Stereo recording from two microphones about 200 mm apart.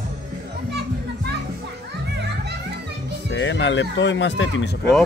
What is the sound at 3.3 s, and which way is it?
Speech, 65° left (ahead or behind).